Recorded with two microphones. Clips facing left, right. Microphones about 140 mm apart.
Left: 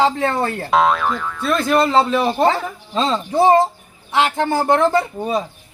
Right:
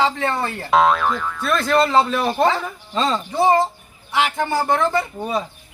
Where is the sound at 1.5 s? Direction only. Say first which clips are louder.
Left 1 dB; 20° left (ahead or behind).